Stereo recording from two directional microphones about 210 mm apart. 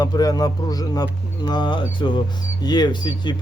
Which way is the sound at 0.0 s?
20° left (ahead or behind).